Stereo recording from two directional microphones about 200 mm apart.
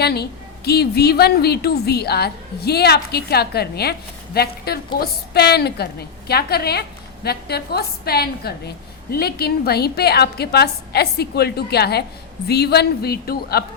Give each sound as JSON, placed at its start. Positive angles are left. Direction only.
{"t": 0.0, "sound": "a woman's voice", "side_deg": 55}